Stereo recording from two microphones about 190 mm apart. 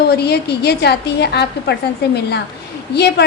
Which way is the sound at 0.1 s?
60° left (ahead or behind).